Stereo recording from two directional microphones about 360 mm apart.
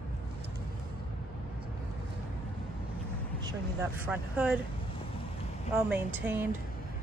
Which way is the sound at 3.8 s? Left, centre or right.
Centre.